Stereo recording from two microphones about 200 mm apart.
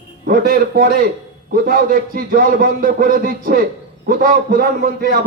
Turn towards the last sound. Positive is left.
turn(degrees=-45)  # may be behind; listen again after turning